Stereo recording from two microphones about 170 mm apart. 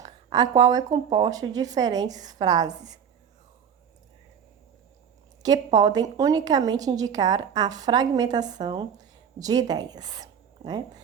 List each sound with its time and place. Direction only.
0.0 s a woman's voice: 20° right (ahead or behind)
5.4 s a woman's voice: 25° right (ahead or behind)